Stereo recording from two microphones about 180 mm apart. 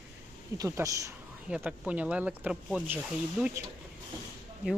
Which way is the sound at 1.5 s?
5° right (ahead or behind).